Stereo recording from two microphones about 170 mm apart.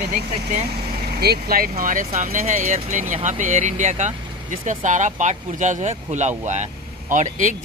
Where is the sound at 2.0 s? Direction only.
40° right (ahead or behind).